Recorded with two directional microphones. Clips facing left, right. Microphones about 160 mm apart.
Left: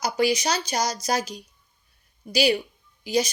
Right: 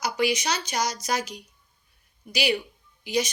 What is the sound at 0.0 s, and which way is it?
Speech, 35° left (ahead or behind).